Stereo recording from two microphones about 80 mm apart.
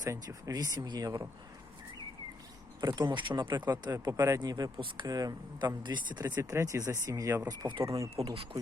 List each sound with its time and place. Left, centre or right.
0.0 s speech: right
2.8 s speech: right
6.5 s speech: right